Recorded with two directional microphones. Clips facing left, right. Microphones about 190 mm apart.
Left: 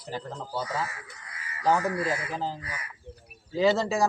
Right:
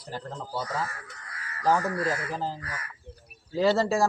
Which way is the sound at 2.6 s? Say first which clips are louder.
Even; 15° left (ahead or behind).